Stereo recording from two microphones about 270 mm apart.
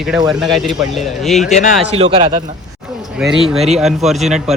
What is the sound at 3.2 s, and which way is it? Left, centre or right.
Speech, centre.